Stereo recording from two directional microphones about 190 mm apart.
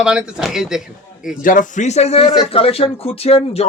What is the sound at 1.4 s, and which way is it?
Speech, 45° left (ahead or behind).